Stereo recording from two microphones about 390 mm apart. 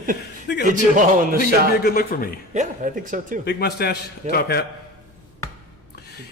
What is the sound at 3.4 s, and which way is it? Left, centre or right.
Speech, left.